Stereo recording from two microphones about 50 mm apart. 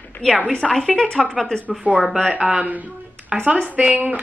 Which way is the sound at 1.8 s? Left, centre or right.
Right.